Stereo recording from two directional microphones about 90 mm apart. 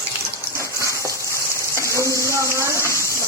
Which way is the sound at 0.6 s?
35° right (ahead or behind).